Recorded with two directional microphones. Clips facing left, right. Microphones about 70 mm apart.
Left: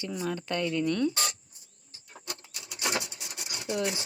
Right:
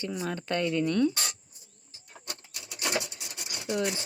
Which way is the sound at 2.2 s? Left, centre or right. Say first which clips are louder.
Left 1 dB; right.